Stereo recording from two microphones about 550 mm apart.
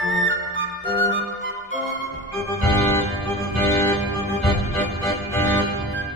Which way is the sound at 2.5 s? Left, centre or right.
Centre.